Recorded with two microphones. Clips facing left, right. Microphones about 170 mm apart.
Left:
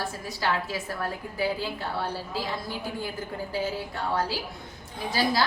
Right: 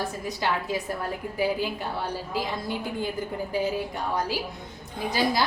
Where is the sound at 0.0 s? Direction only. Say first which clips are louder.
Right 2 dB; 20° right (ahead or behind).